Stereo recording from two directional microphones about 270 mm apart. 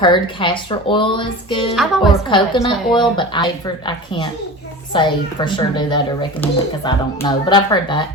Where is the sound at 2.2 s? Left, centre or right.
Centre.